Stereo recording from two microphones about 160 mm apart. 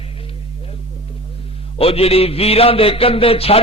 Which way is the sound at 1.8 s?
40° left (ahead or behind).